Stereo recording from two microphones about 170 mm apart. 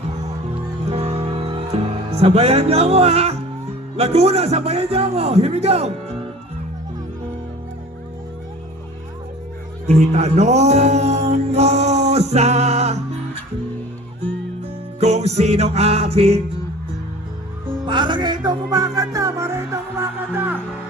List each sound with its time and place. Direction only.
0.9 s music: 40° right (ahead or behind)
3.9 s a man's voice: 35° right (ahead or behind)
9.8 s music: 40° right (ahead or behind)
15.0 s music: 40° right (ahead or behind)
17.8 s music: 30° right (ahead or behind); by 20.6 s 10° right (ahead or behind)